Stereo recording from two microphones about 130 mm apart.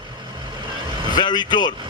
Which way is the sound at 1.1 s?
35° left (ahead or behind).